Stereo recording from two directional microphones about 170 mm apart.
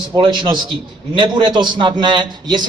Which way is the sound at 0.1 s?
25° right (ahead or behind).